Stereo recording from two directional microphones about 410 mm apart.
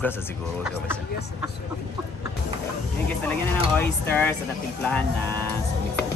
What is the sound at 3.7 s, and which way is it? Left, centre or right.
Speech, centre.